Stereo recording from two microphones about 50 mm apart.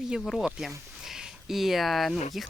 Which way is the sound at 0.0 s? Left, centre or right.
Centre.